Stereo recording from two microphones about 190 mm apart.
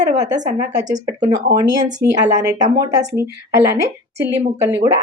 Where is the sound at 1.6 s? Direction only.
20° right (ahead or behind).